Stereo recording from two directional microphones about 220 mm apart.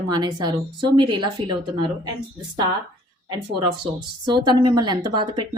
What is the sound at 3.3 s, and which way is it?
Speech, 20° right (ahead or behind).